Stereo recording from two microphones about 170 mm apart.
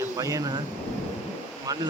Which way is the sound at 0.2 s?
20° right (ahead or behind).